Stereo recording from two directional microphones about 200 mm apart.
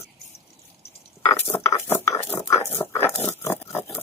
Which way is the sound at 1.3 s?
10° left (ahead or behind).